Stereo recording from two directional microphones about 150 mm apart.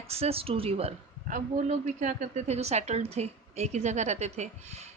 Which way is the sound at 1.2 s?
55° right (ahead or behind).